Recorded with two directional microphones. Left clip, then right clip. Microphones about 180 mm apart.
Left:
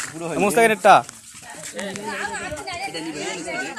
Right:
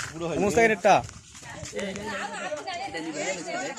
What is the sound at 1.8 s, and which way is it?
Speech, 50° left (ahead or behind).